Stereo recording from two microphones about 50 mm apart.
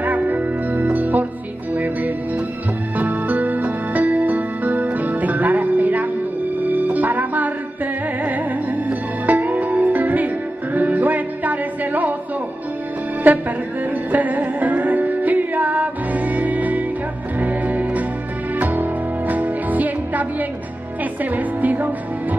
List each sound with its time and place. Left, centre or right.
0.0 s music: right
13.2 s music: right